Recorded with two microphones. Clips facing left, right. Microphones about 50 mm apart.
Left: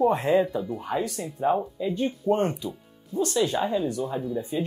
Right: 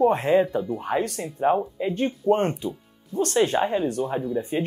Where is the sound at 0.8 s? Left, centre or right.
Right.